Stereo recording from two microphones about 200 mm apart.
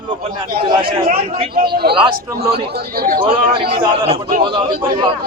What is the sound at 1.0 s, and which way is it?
Speech, 50° right (ahead or behind).